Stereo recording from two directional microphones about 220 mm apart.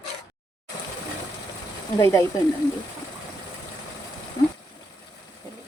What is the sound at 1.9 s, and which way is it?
Speech, 15° left (ahead or behind).